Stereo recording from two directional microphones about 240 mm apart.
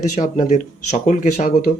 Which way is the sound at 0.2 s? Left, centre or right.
Left.